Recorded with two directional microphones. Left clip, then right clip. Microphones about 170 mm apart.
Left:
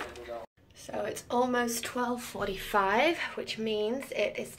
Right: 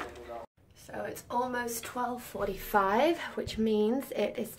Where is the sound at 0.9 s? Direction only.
Centre (ahead or behind); by 3.5 s 20° right (ahead or behind).